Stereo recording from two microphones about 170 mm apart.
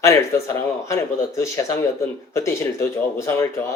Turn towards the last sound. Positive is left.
turn(degrees=15)  # may be behind; listen again after turning